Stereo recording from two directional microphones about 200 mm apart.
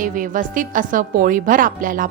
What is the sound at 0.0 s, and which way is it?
A woman's voice, 40° right (ahead or behind).